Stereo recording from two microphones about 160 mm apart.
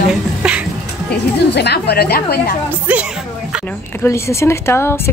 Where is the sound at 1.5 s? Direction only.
90° left.